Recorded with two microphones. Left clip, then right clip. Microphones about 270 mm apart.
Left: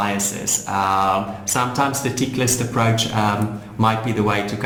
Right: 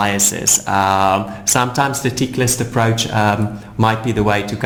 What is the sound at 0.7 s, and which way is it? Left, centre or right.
Speech, right.